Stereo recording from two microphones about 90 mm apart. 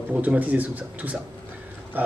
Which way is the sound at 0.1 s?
15° right (ahead or behind).